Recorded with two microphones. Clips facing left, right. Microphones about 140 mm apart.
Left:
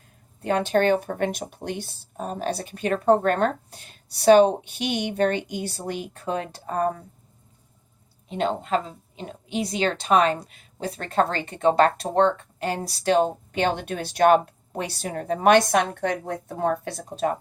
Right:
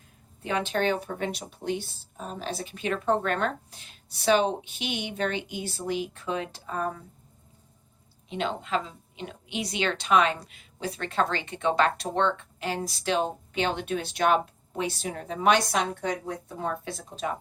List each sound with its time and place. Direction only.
0.4 s speech: 45° left (ahead or behind)
8.3 s a woman's voice: 45° left (ahead or behind)